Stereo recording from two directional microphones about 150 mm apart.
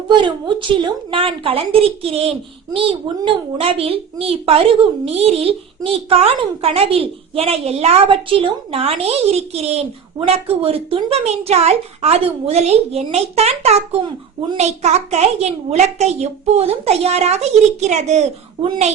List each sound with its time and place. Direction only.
0.1 s a child's voice: 30° right (ahead or behind); by 18.3 s 50° right (ahead or behind)